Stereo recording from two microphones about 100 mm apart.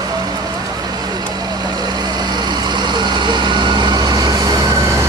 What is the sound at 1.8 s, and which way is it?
Vehicle, 45° right (ahead or behind).